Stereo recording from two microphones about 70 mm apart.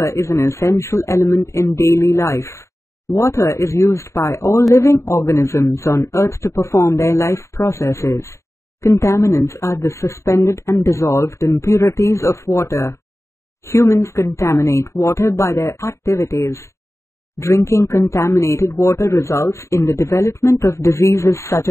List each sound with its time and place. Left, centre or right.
0.0 s speech: left